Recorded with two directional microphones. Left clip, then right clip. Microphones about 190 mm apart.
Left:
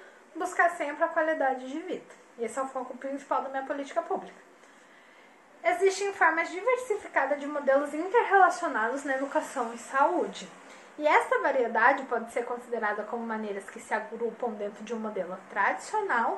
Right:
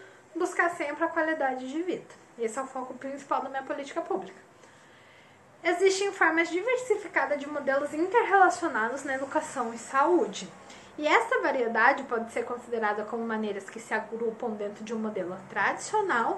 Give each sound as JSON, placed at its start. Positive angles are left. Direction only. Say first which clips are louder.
{"t": 0.4, "sound": "a woman's voice", "louder": "left 1 dB", "side_deg": -15}
{"t": 5.6, "sound": "a woman's voice", "louder": "right 1 dB", "side_deg": -20}